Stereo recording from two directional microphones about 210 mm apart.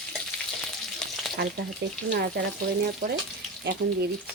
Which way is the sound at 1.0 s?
Centre (ahead or behind).